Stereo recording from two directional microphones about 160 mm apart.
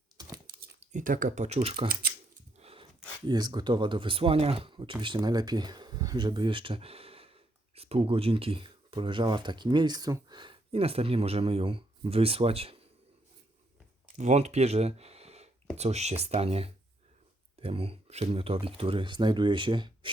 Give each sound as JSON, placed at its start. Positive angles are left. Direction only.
{"t": 0.8, "sound": "speech", "side_deg": -55}
{"t": 1.9, "sound": "a sound", "side_deg": -65}
{"t": 2.6, "sound": "dog", "side_deg": -40}
{"t": 3.2, "sound": "speech", "side_deg": -25}
{"t": 14.2, "sound": "speech", "side_deg": -45}